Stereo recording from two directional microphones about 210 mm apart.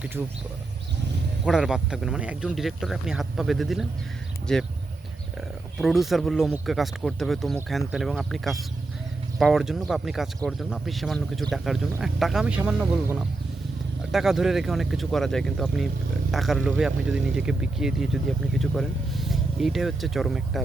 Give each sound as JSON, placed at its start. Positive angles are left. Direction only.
{"t": 0.2, "sound": "speech", "side_deg": -5}
{"t": 1.5, "sound": "speech", "side_deg": 0}
{"t": 5.8, "sound": "speech", "side_deg": 0}